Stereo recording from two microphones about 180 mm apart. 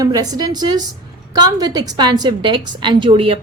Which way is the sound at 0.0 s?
20° right (ahead or behind).